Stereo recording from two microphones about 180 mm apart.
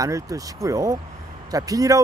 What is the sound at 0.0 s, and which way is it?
Speech, 20° right (ahead or behind).